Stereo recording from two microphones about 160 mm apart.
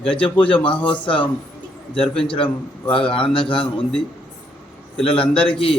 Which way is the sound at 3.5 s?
5° left (ahead or behind).